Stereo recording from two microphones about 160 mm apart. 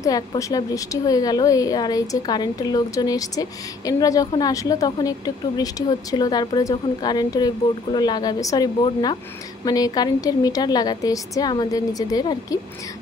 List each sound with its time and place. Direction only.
0.0 s a woman's voice: 20° left (ahead or behind)